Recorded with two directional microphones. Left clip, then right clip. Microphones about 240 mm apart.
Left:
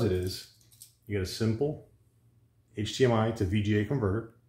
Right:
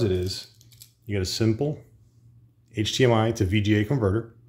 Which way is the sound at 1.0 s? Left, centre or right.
Right.